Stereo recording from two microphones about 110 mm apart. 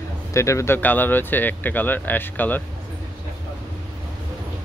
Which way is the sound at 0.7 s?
15° left (ahead or behind).